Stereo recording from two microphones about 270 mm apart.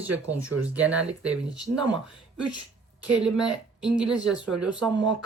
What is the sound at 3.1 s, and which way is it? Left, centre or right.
Speech, centre.